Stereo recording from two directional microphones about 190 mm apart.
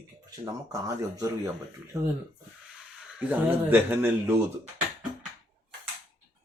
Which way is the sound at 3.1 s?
10° right (ahead or behind).